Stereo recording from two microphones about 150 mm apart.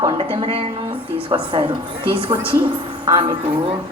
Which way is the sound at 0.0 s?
35° right (ahead or behind).